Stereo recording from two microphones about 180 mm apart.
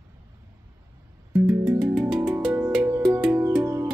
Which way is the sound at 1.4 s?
15° right (ahead or behind).